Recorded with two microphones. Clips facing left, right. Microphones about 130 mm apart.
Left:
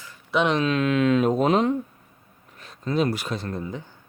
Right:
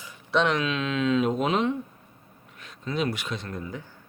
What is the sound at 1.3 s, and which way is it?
Speech, 40° left (ahead or behind).